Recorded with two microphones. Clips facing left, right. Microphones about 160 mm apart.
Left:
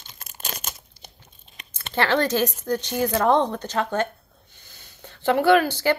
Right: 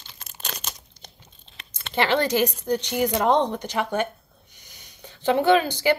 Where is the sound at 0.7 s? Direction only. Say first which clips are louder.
Even; 10° left (ahead or behind).